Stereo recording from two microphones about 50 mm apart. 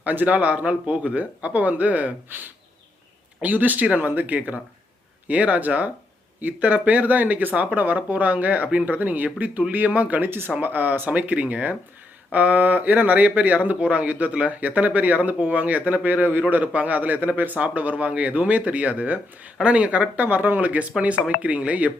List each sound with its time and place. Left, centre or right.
0.0 s speech: right
20.2 s speech: right